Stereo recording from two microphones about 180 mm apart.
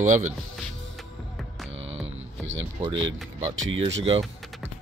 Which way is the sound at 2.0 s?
90° right.